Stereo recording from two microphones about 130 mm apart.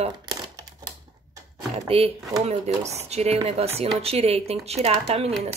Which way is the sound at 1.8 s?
50° right (ahead or behind).